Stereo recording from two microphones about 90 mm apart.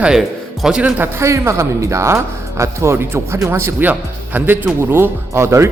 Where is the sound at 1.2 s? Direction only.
35° right (ahead or behind).